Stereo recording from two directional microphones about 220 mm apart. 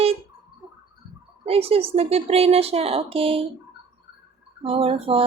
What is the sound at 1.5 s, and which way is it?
Speech, 25° right (ahead or behind).